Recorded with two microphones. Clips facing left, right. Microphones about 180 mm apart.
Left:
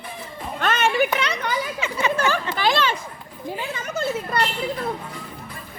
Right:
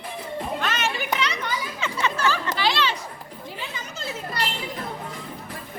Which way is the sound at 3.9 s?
60° left (ahead or behind).